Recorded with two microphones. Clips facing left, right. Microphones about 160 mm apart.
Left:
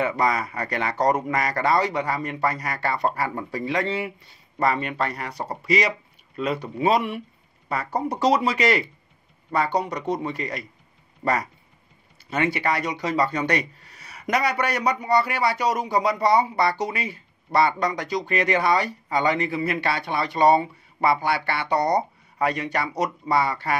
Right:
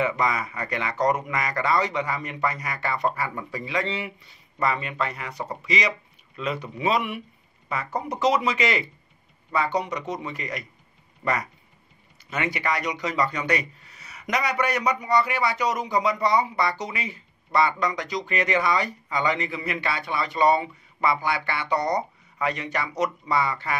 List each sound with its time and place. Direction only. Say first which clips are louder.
0.0 s speech: left 2 dB; 35° left (ahead or behind)
9.8 s speech: left 3 dB; 35° left (ahead or behind)
12.4 s speech: left 1 dB; 30° left (ahead or behind)